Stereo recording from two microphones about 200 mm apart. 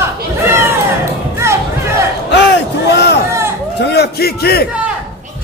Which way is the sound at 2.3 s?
60° left (ahead or behind).